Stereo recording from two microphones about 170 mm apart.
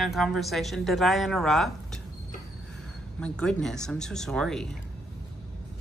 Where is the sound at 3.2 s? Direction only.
5° left (ahead or behind).